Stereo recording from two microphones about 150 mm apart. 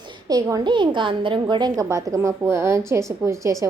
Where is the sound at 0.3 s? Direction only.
25° right (ahead or behind).